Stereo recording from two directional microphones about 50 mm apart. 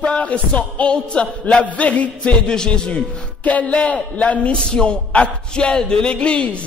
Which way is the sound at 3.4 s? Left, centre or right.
Left.